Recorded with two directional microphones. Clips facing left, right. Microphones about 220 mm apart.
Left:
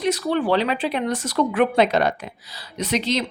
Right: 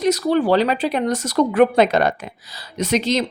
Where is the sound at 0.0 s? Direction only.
40° right (ahead or behind).